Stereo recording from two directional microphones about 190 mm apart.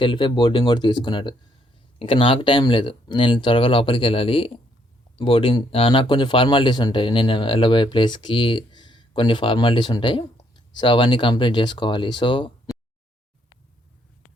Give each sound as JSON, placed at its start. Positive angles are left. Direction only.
{"t": 0.0, "sound": "speech", "side_deg": 25}